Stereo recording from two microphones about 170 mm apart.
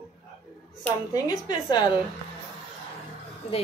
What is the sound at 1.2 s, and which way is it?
Speech, 25° left (ahead or behind).